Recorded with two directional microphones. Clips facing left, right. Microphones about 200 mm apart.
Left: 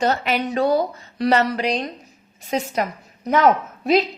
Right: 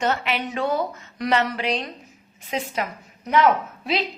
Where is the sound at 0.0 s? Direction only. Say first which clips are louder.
Left 4 dB; 40° left (ahead or behind).